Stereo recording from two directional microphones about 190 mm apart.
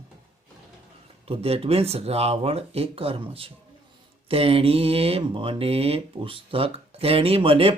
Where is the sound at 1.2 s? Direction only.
30° right (ahead or behind).